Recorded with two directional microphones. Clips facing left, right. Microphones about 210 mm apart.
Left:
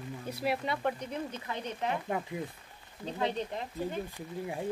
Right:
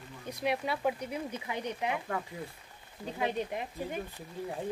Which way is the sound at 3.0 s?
10° right (ahead or behind).